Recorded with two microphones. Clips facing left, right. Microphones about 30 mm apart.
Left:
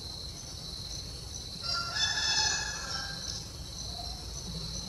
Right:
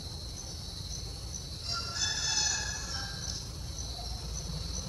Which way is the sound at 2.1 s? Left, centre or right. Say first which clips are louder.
Left 2 dB; left.